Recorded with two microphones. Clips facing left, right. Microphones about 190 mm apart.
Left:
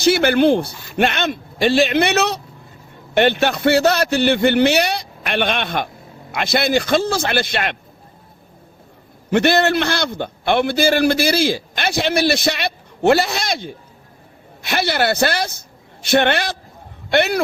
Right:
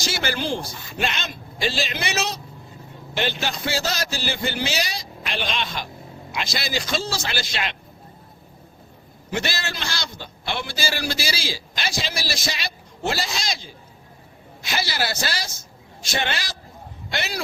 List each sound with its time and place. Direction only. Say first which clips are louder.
0.0 s a man's voice: left 13 dB; 60° left (ahead or behind)
9.3 s a man's voice: left 13 dB; 60° left (ahead or behind)